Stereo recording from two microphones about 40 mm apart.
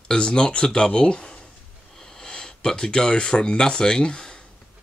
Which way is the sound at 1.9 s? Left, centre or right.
Centre.